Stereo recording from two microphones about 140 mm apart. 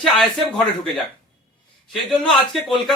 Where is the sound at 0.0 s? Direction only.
Centre (ahead or behind).